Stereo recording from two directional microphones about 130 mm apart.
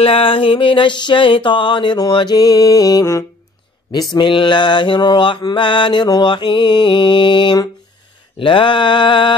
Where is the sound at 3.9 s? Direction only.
35° left (ahead or behind).